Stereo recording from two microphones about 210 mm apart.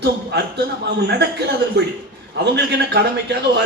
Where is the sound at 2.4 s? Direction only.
55° right (ahead or behind).